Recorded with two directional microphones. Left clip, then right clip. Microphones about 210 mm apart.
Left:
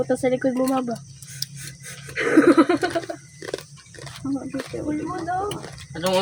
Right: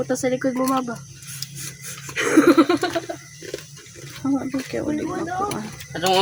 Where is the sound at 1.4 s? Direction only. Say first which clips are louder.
Left 3 dB; 40° left (ahead or behind).